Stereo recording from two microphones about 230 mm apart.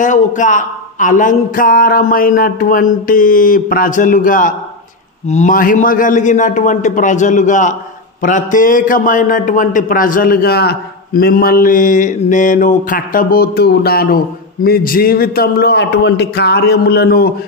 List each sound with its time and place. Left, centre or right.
0.0 s a man's voice: left